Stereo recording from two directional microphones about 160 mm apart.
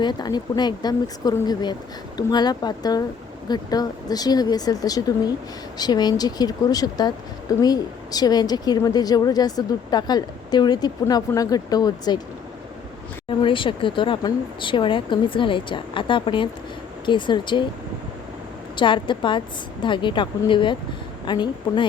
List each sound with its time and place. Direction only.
0.0 s a woman's voice: 25° left (ahead or behind)
13.2 s a woman's voice: 30° left (ahead or behind)
18.8 s a woman's voice: 30° left (ahead or behind)